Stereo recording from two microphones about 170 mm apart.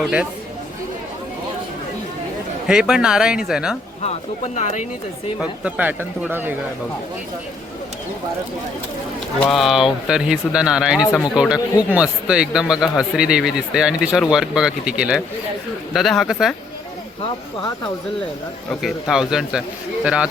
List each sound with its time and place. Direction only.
0.0 s speech: 5° right (ahead or behind)
2.6 s a man's voice: 5° right (ahead or behind)
4.5 s speech: 45° left (ahead or behind)
5.4 s speech: 10° right (ahead or behind)
9.4 s a man's voice: centre (ahead or behind)
18.7 s a man's voice: centre (ahead or behind)